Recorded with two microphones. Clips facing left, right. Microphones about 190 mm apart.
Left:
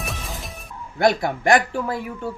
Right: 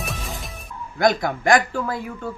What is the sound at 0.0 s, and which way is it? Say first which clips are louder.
Music: right 1 dB; centre (ahead or behind).